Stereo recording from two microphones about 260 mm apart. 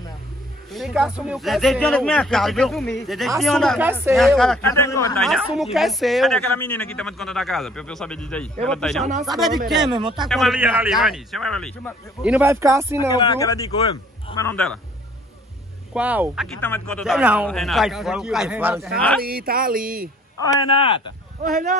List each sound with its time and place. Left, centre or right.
0.7 s speech: centre
5.2 s speech: centre
9.8 s speech: centre
10.2 s speech: centre
13.1 s speech: centre
15.9 s speech: centre
16.6 s speech: centre
19.2 s speech: right
20.4 s speech: centre
21.5 s speech: right